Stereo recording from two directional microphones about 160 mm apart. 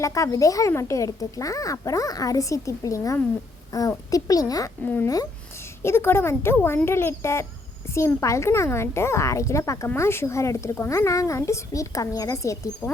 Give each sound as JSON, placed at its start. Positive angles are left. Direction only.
{"t": 0.0, "sound": "a woman's voice", "side_deg": 20}